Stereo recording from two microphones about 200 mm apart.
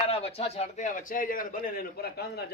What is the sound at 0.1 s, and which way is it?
A man's voice, 30° left (ahead or behind).